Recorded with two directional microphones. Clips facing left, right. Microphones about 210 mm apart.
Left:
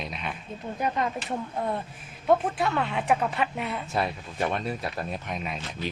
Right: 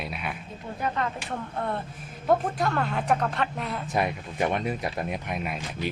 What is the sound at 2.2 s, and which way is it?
Speech, 5° left (ahead or behind).